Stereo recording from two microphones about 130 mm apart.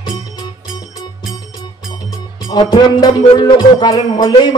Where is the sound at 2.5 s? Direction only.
35° left (ahead or behind).